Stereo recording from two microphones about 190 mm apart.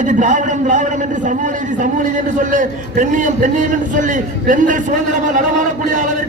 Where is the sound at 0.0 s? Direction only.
40° right (ahead or behind).